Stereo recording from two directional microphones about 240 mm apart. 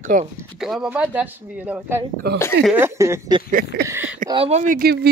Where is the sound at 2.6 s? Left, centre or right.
Centre.